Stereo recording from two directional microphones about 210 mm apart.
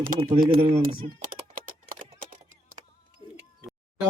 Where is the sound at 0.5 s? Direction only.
45° right (ahead or behind).